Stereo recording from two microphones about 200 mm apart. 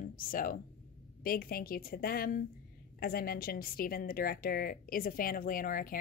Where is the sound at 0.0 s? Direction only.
45° left (ahead or behind).